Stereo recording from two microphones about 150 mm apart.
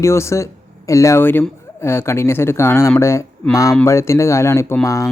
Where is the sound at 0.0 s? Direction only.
20° left (ahead or behind).